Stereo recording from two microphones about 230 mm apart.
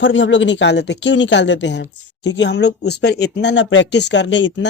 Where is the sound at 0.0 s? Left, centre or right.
Left.